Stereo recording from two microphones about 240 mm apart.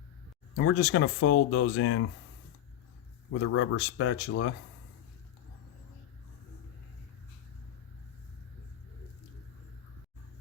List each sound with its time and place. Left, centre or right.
0.5 s speech: left
3.4 s speech: left